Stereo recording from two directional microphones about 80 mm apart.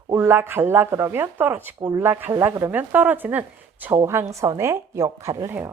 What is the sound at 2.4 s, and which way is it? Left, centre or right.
Speech, right.